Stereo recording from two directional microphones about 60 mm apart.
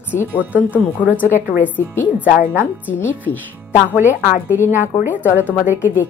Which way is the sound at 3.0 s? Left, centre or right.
Left.